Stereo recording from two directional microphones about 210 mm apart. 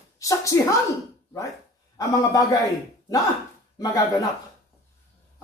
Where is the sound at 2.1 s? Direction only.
15° left (ahead or behind).